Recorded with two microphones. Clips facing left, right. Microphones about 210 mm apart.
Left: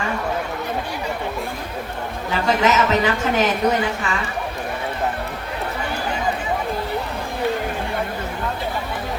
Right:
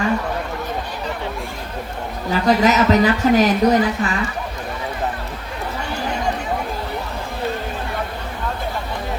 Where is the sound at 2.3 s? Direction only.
35° right (ahead or behind).